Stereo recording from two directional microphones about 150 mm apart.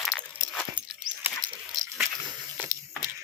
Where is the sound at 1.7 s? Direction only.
25° right (ahead or behind).